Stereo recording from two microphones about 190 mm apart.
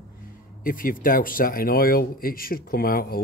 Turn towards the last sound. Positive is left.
turn(degrees=50)  # may be behind; listen again after turning